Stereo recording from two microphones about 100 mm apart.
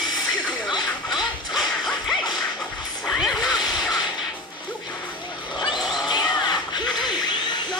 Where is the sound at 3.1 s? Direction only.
Centre (ahead or behind).